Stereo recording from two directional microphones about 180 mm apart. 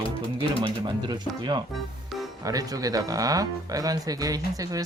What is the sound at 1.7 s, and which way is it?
Music, centre (ahead or behind).